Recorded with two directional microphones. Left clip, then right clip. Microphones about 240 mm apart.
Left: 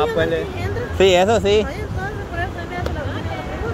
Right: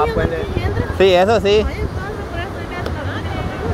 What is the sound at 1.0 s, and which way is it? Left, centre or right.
Speech, centre.